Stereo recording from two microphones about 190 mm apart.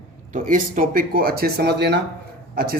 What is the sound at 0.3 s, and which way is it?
Speech, 45° right (ahead or behind).